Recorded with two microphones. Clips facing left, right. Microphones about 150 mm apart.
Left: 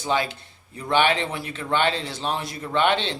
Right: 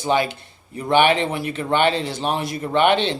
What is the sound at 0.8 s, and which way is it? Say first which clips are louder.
Speech: right 4 dB; 15° right (ahead or behind).